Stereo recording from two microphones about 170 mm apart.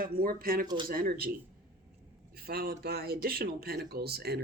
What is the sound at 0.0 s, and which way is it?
Speech, 55° right (ahead or behind).